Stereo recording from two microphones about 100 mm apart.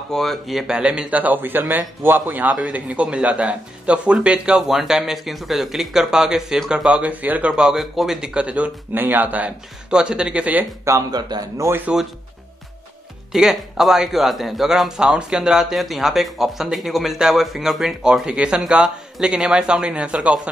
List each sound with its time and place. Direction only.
0.1 s speech: centre (ahead or behind); by 10.7 s 15° right (ahead or behind)
10.9 s speech: 40° right (ahead or behind)
11.6 s speech: 20° right (ahead or behind)
13.3 s a man's voice: 5° right (ahead or behind)